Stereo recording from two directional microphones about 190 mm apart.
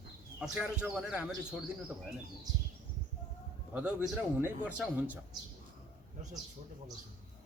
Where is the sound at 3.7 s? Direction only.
5° right (ahead or behind).